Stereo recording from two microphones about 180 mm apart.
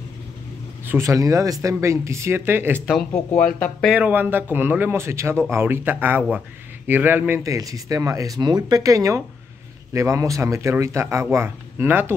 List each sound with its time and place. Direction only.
0.8 s speech: 15° right (ahead or behind)
3.1 s speech: 10° left (ahead or behind)
3.9 s speech: 10° right (ahead or behind)